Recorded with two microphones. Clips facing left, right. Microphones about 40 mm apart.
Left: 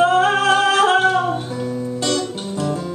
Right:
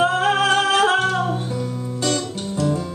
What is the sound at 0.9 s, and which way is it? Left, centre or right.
Music, centre.